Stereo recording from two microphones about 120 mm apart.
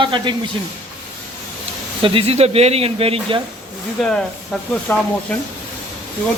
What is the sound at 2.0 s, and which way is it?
Speech, 45° right (ahead or behind).